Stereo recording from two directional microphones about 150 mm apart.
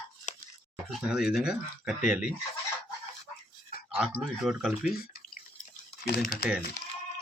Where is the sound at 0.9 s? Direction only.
5° right (ahead or behind).